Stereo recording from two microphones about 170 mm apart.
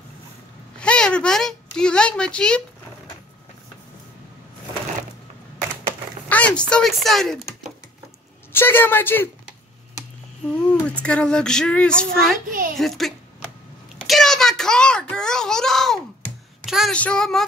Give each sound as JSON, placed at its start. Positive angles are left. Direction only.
{"t": 0.7, "sound": "speech", "side_deg": 5}
{"t": 6.2, "sound": "speech", "side_deg": 10}
{"t": 8.5, "sound": "speech", "side_deg": 15}
{"t": 10.7, "sound": "female singing", "side_deg": 5}
{"t": 12.4, "sound": "a woman's voice", "side_deg": -55}
{"t": 12.7, "sound": "female singing", "side_deg": 0}
{"t": 13.9, "sound": "a child's voice", "side_deg": 0}
{"t": 16.6, "sound": "female singing", "side_deg": 0}